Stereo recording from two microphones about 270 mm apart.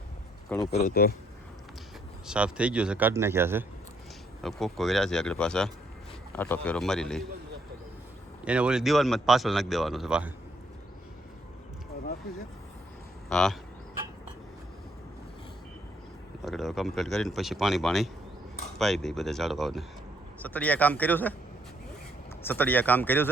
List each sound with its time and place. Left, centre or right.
0.8 s speech: left
2.2 s speech: centre
8.4 s speech: centre
13.2 s speech: centre
16.4 s a man's voice: centre
22.4 s a man's voice: centre